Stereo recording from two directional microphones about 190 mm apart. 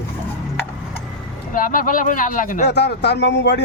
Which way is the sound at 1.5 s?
45° left (ahead or behind).